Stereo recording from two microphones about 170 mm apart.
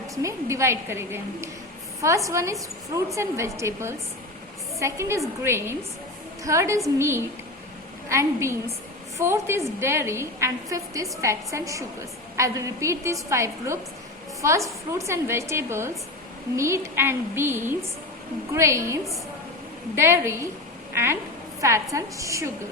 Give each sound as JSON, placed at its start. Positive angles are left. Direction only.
{"t": 0.2, "sound": "a woman's voice", "side_deg": -15}
{"t": 20.0, "sound": "a woman's voice", "side_deg": -15}